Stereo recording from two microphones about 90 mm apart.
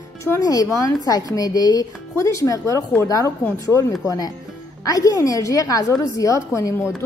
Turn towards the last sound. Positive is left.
turn(degrees=35)  # may be behind; listen again after turning